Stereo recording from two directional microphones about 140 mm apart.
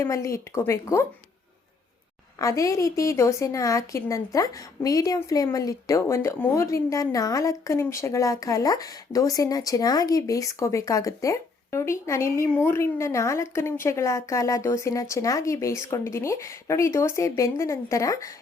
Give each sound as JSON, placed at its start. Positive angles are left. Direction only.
{"t": 0.0, "sound": "a woman's voice", "side_deg": 20}
{"t": 2.4, "sound": "a woman's voice", "side_deg": 20}